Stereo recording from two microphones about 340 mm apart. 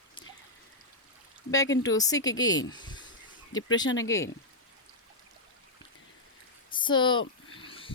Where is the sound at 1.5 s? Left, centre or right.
Centre.